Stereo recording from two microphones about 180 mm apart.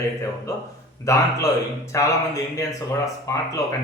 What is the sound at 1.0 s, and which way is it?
Speech, 15° left (ahead or behind).